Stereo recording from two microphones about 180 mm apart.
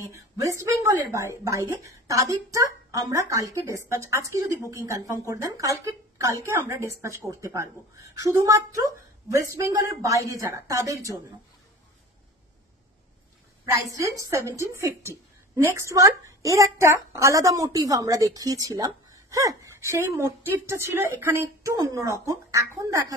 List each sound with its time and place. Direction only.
0.0 s a woman's voice: 15° right (ahead or behind)
13.7 s a woman's voice: 20° right (ahead or behind)